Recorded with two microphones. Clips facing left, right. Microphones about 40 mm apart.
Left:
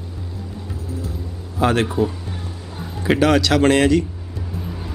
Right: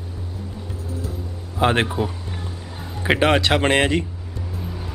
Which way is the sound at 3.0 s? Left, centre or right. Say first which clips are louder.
Left 2 dB; right.